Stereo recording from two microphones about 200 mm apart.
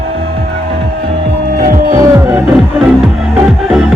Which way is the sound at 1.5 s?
45° right (ahead or behind).